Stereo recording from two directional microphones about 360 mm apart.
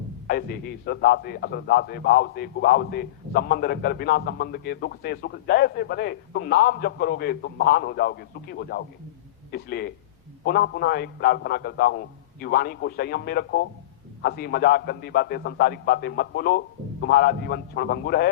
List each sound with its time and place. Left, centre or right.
0.3 s a man's voice: left